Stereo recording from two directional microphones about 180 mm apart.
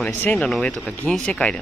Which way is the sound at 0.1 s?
10° left (ahead or behind).